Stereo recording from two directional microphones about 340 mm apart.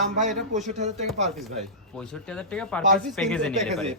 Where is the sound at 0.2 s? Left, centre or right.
Right.